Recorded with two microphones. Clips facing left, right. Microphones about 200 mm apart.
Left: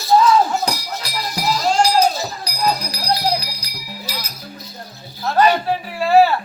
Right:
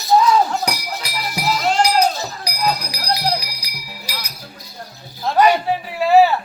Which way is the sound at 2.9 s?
15° right (ahead or behind).